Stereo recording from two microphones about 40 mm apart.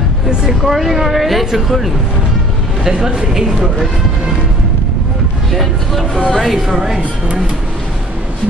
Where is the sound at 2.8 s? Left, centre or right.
Centre.